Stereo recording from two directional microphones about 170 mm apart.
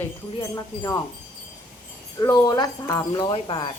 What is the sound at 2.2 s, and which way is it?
Wind chime, 20° left (ahead or behind).